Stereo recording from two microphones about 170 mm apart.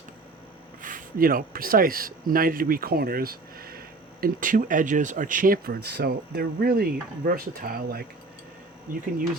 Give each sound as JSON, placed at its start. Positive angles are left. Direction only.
{"t": 0.8, "sound": "speech", "side_deg": -50}